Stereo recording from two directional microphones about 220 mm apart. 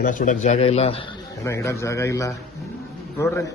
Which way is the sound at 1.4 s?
15° left (ahead or behind).